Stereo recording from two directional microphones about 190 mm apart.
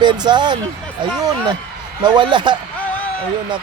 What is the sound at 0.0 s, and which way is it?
Speech, 25° right (ahead or behind).